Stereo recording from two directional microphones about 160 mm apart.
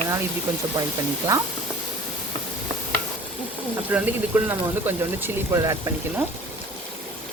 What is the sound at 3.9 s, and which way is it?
Speech, 10° right (ahead or behind).